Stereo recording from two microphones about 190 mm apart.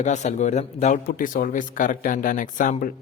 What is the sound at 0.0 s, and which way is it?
A man's voice, 40° left (ahead or behind).